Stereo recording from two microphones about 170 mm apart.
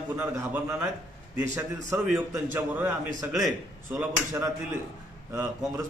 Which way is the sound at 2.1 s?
10° right (ahead or behind).